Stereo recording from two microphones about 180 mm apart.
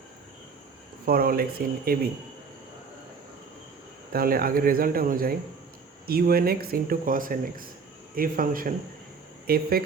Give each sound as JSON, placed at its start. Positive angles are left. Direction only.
{"t": 1.0, "sound": "speech", "side_deg": -55}
{"t": 4.1, "sound": "speech", "side_deg": -55}